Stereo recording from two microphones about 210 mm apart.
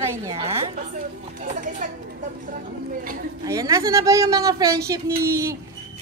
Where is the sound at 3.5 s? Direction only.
15° right (ahead or behind).